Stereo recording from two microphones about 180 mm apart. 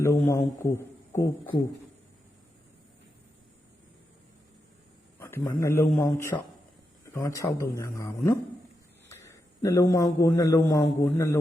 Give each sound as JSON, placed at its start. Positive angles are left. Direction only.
{"t": 0.0, "sound": "speech", "side_deg": 15}
{"t": 5.2, "sound": "a man's voice", "side_deg": 15}